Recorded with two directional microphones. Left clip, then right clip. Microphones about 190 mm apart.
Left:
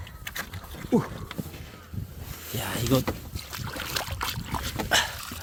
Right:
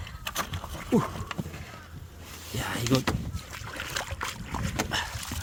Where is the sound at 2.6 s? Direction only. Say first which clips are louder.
Left 1 dB; 20° left (ahead or behind).